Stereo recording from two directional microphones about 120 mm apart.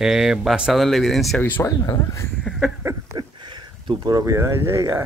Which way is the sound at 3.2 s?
40° right (ahead or behind).